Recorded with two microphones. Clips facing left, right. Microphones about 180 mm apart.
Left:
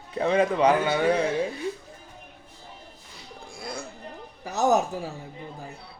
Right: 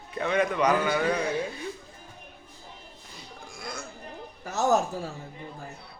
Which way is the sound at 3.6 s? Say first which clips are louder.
Left 3 dB; 30° left (ahead or behind).